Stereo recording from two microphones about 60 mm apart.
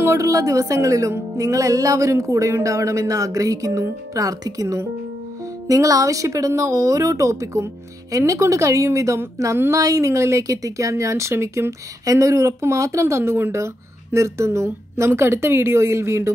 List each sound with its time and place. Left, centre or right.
0.0 s speech: right
9.7 s speech: right
13.0 s a woman's voice: right